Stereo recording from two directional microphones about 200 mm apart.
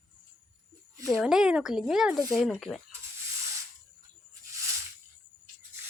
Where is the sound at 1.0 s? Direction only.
Centre (ahead or behind).